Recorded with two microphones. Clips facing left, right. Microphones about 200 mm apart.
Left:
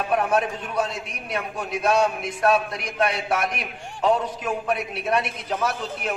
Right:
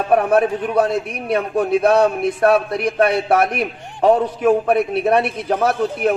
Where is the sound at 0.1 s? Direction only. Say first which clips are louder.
Right 8 dB; 60° right (ahead or behind).